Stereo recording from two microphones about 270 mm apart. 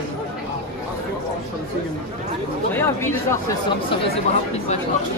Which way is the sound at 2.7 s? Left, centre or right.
Centre.